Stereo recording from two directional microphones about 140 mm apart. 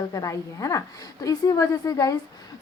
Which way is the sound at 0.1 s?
25° left (ahead or behind).